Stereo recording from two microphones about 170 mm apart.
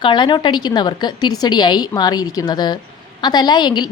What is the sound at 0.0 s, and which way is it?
A woman's voice, 30° left (ahead or behind).